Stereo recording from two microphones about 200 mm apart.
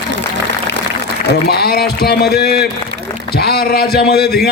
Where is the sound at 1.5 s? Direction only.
50° left (ahead or behind).